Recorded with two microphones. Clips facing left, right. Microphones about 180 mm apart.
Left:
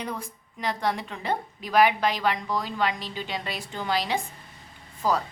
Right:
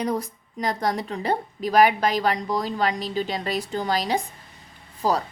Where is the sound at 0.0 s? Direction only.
40° right (ahead or behind).